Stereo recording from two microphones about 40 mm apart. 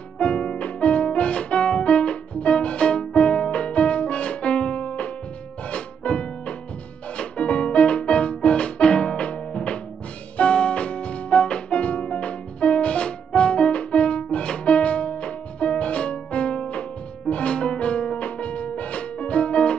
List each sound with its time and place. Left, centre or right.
0.2 s music: left